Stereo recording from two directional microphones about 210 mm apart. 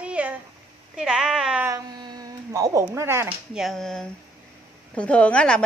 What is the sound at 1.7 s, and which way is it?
A woman's voice, 20° right (ahead or behind).